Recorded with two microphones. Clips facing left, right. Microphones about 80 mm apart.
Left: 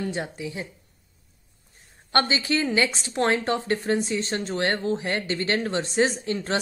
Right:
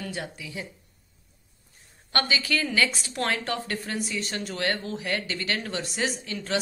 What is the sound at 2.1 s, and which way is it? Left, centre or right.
A woman's voice, left.